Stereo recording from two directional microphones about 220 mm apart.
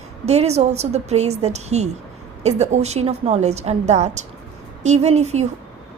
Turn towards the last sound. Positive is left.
turn(degrees=-30)  # may be behind; listen again after turning